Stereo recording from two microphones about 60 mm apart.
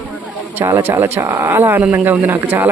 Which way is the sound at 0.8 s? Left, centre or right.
Right.